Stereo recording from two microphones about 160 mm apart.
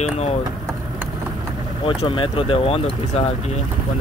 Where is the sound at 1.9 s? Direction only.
30° left (ahead or behind).